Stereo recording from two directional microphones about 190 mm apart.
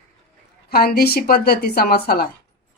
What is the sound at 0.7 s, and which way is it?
Speech, 55° left (ahead or behind).